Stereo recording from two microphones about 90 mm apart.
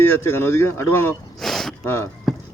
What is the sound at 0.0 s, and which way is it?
Speech, 25° left (ahead or behind).